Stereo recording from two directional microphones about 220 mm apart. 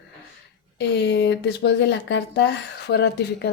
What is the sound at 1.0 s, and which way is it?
Speech, 50° left (ahead or behind).